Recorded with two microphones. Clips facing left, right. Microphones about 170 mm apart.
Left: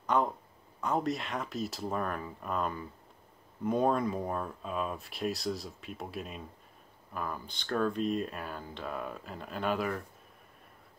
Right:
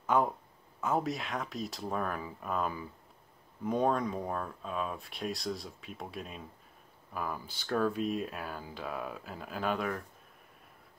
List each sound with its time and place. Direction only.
0.0 s speech: 5° right (ahead or behind)